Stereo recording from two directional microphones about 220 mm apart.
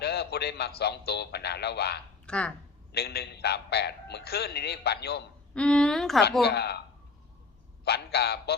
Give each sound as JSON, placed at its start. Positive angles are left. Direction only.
{"t": 0.0, "sound": "a man's voice", "side_deg": 45}
{"t": 2.2, "sound": "speech", "side_deg": 5}
{"t": 2.9, "sound": "a man's voice", "side_deg": 45}
{"t": 5.5, "sound": "a woman's voice", "side_deg": 5}
{"t": 6.4, "sound": "a man's voice", "side_deg": 50}
{"t": 7.9, "sound": "a man's voice", "side_deg": 45}